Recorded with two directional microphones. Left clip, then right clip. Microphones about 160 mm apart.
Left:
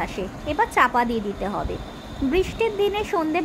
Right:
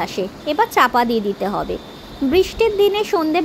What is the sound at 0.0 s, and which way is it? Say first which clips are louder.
Speech: right 6 dB; 30° right (ahead or behind).